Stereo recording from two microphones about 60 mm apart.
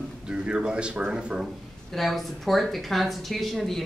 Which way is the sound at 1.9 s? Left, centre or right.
Centre.